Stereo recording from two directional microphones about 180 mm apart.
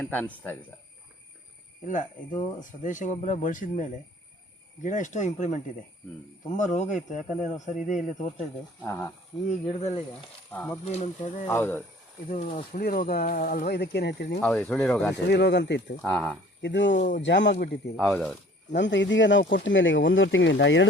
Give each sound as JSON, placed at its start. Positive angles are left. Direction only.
{"t": 0.0, "sound": "speech", "side_deg": 10}
{"t": 2.6, "sound": "speech", "side_deg": 45}
{"t": 8.8, "sound": "speech", "side_deg": 15}
{"t": 9.6, "sound": "speech", "side_deg": 35}
{"t": 10.5, "sound": "speech", "side_deg": 10}
{"t": 10.8, "sound": "speech", "side_deg": 40}
{"t": 11.4, "sound": "speech", "side_deg": 10}
{"t": 12.3, "sound": "speech", "side_deg": 40}
{"t": 14.4, "sound": "speech", "side_deg": 5}
{"t": 15.1, "sound": "speech", "side_deg": 70}
{"t": 16.0, "sound": "speech", "side_deg": 5}
{"t": 16.6, "sound": "speech", "side_deg": 75}
{"t": 17.9, "sound": "speech", "side_deg": 0}
{"t": 18.8, "sound": "speech", "side_deg": 85}